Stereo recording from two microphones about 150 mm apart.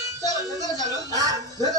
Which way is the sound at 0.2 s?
20° right (ahead or behind).